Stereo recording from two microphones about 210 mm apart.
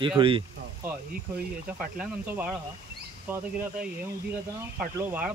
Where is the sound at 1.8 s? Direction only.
5° right (ahead or behind).